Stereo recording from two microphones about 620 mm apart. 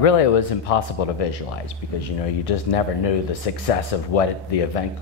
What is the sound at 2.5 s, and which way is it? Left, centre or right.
Speech, left.